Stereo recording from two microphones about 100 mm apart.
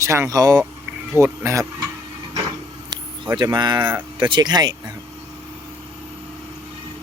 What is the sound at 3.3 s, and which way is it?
Speech, 45° right (ahead or behind).